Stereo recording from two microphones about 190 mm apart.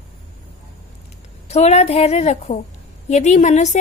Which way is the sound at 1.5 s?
35° left (ahead or behind).